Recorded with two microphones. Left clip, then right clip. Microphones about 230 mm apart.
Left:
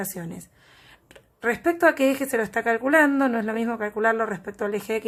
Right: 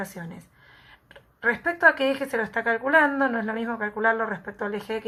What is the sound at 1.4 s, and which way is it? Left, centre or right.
Speech, left.